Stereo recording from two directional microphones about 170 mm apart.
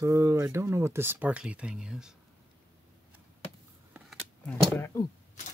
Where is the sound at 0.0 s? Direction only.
20° right (ahead or behind).